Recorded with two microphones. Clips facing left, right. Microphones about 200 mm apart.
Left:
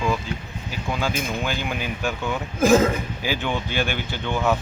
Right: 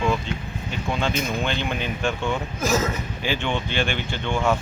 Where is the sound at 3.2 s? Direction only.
5° left (ahead or behind).